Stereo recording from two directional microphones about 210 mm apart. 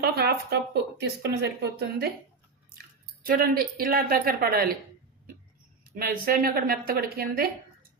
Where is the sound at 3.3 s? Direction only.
45° right (ahead or behind).